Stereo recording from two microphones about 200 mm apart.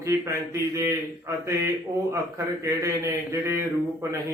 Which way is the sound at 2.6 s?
15° right (ahead or behind).